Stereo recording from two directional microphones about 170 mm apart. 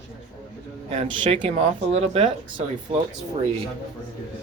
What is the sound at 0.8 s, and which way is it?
Speech, 30° right (ahead or behind).